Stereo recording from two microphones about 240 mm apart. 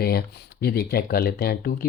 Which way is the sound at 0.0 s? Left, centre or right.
Left.